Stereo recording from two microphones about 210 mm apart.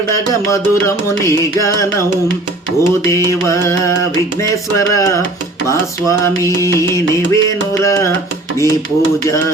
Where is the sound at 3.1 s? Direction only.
15° left (ahead or behind).